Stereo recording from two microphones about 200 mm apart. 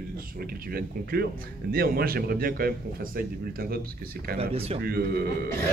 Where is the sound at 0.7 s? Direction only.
50° right (ahead or behind).